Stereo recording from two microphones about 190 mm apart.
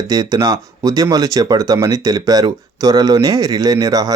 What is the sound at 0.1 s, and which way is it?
Speech, 20° right (ahead or behind).